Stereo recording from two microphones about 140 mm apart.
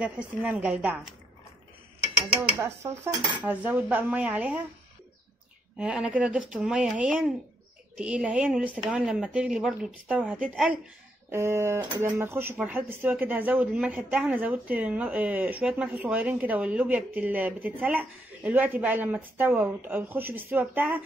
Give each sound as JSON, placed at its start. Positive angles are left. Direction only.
{"t": 0.0, "sound": "a woman's voice", "side_deg": -10}
{"t": 2.6, "sound": "a woman's voice", "side_deg": -20}
{"t": 5.8, "sound": "a woman's voice", "side_deg": -5}
{"t": 11.3, "sound": "a woman's voice", "side_deg": -20}